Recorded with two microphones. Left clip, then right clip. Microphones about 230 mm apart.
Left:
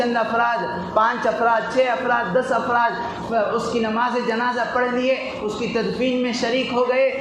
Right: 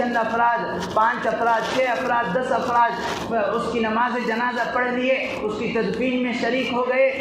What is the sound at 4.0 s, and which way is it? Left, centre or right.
Speech, left.